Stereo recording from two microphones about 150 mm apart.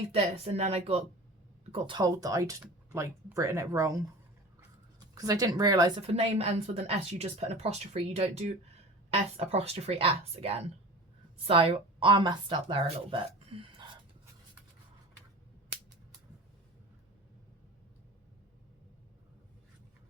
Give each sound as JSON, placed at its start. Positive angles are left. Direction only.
{"t": 0.1, "sound": "a woman's voice", "side_deg": -45}
{"t": 1.7, "sound": "speech", "side_deg": -30}
{"t": 6.0, "sound": "a woman's voice", "side_deg": -40}